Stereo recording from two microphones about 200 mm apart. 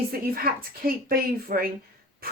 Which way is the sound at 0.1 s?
45° right (ahead or behind).